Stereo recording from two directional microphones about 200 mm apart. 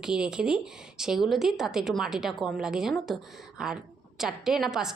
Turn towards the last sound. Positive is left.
turn(degrees=0)  # may be behind; listen again after turning